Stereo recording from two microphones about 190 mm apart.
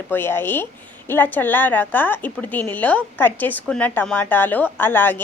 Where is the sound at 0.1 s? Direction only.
10° left (ahead or behind).